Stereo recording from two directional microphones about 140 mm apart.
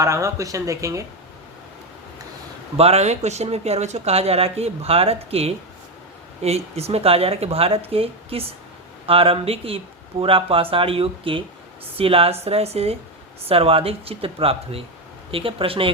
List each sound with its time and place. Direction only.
0.0 s speech: 20° right (ahead or behind)
2.7 s speech: 50° right (ahead or behind)